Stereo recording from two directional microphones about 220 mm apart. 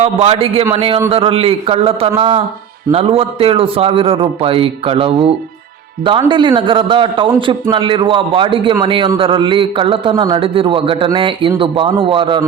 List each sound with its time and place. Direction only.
0.0 s a man's voice: 25° right (ahead or behind)